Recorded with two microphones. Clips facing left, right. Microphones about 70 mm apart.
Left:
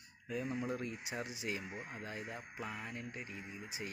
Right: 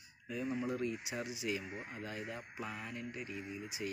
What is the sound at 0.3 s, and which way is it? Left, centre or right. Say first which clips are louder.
Speech: right 1 dB; left.